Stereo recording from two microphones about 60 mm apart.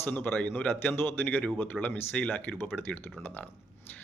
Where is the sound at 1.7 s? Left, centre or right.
Centre.